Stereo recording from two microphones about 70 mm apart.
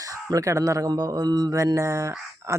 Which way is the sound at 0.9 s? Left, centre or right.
Right.